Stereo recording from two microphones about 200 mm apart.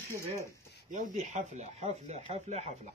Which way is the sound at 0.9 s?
35° right (ahead or behind).